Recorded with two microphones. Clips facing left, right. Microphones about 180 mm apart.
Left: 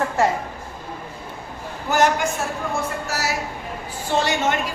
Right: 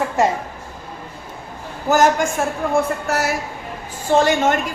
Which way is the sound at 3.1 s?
55° right (ahead or behind).